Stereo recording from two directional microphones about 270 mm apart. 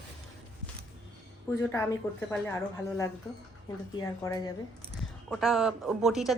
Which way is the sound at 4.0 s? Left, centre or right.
Centre.